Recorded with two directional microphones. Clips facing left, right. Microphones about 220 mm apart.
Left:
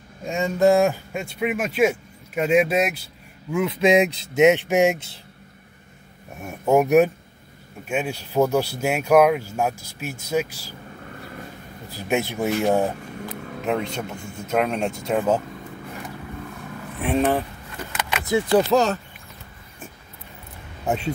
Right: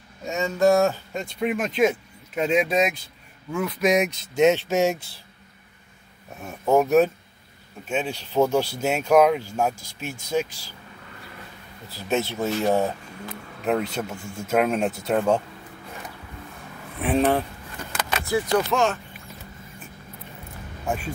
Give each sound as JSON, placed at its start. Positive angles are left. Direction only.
{"t": 0.3, "sound": "speech", "side_deg": 15}
{"t": 3.5, "sound": "speech", "side_deg": 25}
{"t": 6.4, "sound": "speech", "side_deg": 15}
{"t": 11.9, "sound": "speech", "side_deg": 15}
{"t": 13.7, "sound": "speech", "side_deg": -5}
{"t": 17.0, "sound": "speech", "side_deg": 0}
{"t": 18.7, "sound": "speech", "side_deg": 35}
{"t": 20.8, "sound": "speech", "side_deg": 20}